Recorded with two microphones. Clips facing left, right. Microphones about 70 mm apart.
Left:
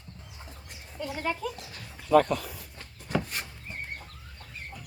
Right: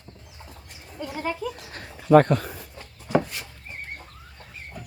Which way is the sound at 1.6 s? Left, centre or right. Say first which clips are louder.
Right 4 dB; right.